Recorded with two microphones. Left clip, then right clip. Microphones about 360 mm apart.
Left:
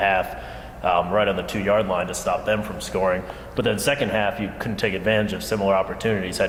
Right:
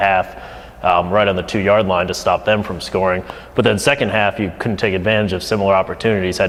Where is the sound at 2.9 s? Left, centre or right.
Right.